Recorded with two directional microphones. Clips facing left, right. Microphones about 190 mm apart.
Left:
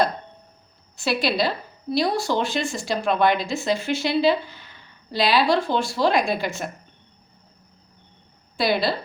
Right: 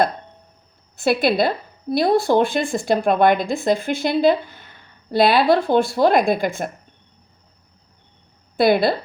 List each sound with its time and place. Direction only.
0.9 s a woman's voice: 50° right (ahead or behind)
8.5 s a woman's voice: 50° right (ahead or behind)